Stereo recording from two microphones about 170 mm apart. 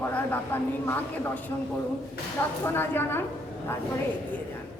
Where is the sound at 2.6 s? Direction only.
15° left (ahead or behind).